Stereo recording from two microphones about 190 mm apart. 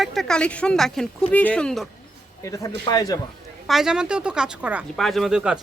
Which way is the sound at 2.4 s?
20° left (ahead or behind).